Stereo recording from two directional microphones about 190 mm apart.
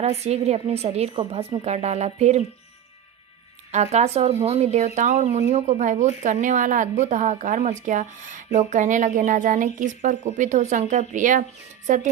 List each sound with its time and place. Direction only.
0.0 s a woman's voice: 35° right (ahead or behind)
3.7 s a woman's voice: 35° right (ahead or behind)